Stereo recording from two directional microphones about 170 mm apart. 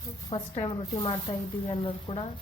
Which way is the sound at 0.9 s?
20° left (ahead or behind).